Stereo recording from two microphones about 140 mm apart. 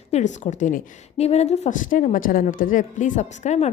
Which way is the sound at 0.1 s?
55° left (ahead or behind).